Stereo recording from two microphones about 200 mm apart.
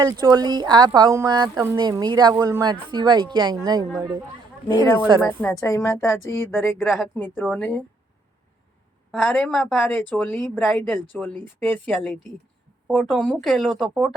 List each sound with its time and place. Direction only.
0.0 s speech: 20° right (ahead or behind)
5.4 s a woman's voice: 15° left (ahead or behind)
6.8 s speech: centre (ahead or behind)
7.2 s a woman's voice: 10° left (ahead or behind)
9.1 s a woman's voice: 5° left (ahead or behind)
12.9 s speech: centre (ahead or behind)